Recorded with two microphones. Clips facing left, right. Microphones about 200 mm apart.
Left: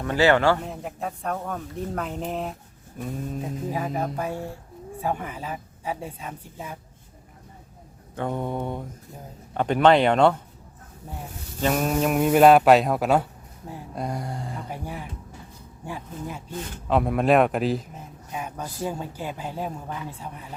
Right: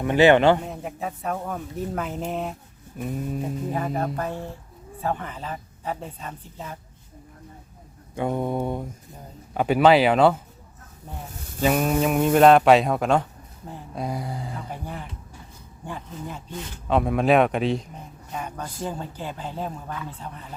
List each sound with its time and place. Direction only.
0.0 s a man's voice: 20° right (ahead or behind)
0.6 s speech: centre (ahead or behind)
3.0 s mantra: 5° right (ahead or behind)
3.7 s speech: 5° left (ahead or behind)
8.1 s mantra: 10° right (ahead or behind)
9.6 s speech: 5° right (ahead or behind)
11.6 s speech: 5° right (ahead or behind)